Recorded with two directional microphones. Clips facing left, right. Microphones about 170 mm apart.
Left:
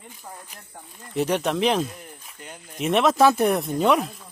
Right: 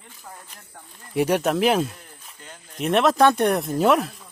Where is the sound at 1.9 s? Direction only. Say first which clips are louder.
Left 4 dB; 15° left (ahead or behind).